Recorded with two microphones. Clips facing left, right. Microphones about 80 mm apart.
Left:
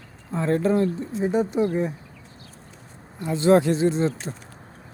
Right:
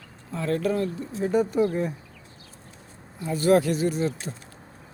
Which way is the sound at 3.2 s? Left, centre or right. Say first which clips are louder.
Left 2 dB; left.